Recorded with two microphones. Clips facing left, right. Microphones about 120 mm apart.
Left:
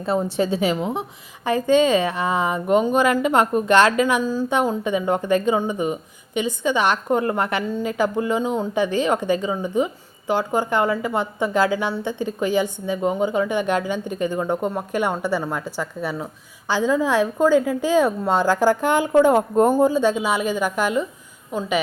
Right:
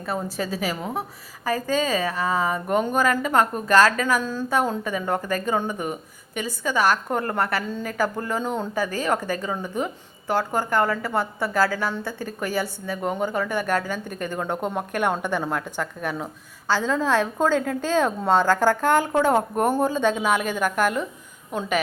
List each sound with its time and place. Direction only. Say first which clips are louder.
0.0 s a woman's voice: left 7 dB; 25° left (ahead or behind)
2.6 s a woman's voice: left 5 dB; 10° left (ahead or behind)
3.9 s a woman's voice: left 4 dB; 15° left (ahead or behind)